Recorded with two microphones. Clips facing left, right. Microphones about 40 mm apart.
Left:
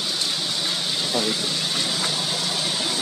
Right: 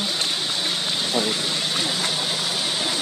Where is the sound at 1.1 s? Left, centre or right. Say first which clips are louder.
Right 1 dB; centre.